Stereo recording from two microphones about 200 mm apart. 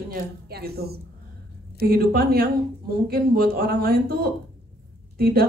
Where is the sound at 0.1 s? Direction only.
50° right (ahead or behind).